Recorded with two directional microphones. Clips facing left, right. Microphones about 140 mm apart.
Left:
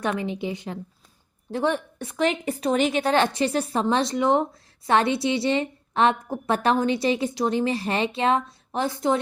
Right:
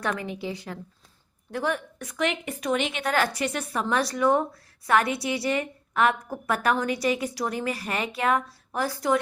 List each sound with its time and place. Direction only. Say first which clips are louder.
0.0 s a woman's voice: left 3 dB; 20° left (ahead or behind)